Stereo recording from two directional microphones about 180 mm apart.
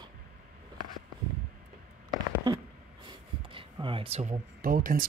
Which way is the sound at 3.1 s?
25° right (ahead or behind).